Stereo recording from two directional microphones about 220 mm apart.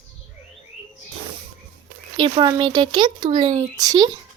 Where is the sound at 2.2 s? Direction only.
20° right (ahead or behind).